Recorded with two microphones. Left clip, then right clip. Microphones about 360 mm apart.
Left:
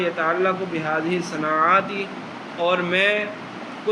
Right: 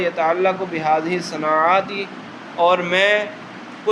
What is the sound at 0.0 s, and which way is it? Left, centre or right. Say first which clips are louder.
A man's voice: right 3 dB; centre.